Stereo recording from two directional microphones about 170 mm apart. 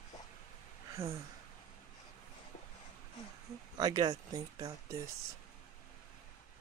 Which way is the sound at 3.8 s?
25° right (ahead or behind).